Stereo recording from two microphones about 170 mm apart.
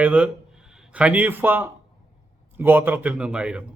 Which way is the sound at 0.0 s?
5° right (ahead or behind).